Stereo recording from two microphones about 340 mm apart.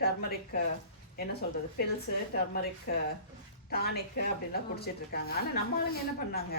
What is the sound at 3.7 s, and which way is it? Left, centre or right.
Speech, left.